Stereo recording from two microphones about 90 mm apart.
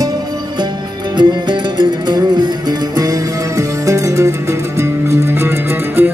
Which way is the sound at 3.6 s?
35° right (ahead or behind).